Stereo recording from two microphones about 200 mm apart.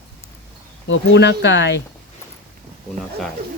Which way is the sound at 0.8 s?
65° left (ahead or behind).